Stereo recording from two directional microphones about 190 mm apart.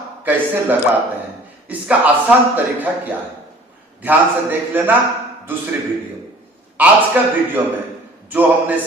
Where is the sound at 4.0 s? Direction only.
10° right (ahead or behind).